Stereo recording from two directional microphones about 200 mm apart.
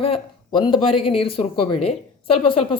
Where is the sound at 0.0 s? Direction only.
25° left (ahead or behind).